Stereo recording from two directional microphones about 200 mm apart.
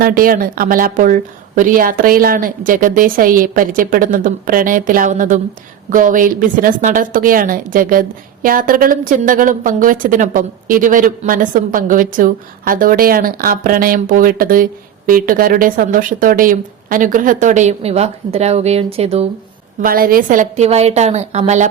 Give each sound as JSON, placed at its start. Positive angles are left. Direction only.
{"t": 0.0, "sound": "a woman's voice", "side_deg": -45}
{"t": 19.8, "sound": "a woman's voice", "side_deg": -45}